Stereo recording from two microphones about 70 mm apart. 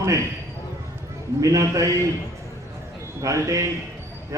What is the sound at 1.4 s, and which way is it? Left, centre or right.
Speech, right.